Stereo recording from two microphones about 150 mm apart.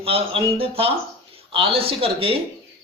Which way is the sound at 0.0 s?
40° right (ahead or behind).